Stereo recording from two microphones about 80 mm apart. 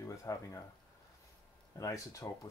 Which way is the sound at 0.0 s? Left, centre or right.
Left.